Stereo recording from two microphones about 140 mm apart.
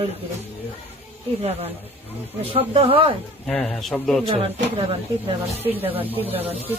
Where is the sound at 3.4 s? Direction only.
5° left (ahead or behind).